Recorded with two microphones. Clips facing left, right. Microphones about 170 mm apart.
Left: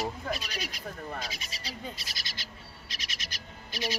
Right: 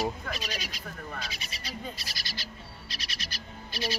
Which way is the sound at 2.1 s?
20° left (ahead or behind).